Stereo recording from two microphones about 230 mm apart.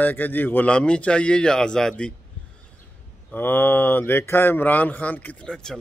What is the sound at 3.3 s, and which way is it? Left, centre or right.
Speech, centre.